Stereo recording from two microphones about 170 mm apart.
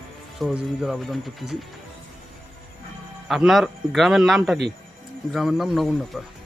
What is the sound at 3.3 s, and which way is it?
Speech, centre (ahead or behind).